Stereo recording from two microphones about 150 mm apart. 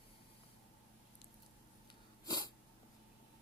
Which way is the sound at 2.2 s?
30° left (ahead or behind).